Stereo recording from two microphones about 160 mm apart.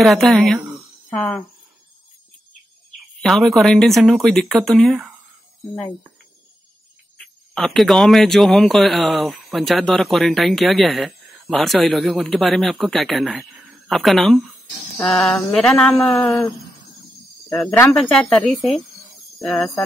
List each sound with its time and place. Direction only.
0.0 s speech: centre (ahead or behind)
0.7 s a sound: 5° left (ahead or behind)
3.2 s speech: centre (ahead or behind)
7.2 s speech: 5° left (ahead or behind)
15.2 s a sound: 5° left (ahead or behind)
16.0 s speech: 20° left (ahead or behind)
17.9 s speech: 5° left (ahead or behind)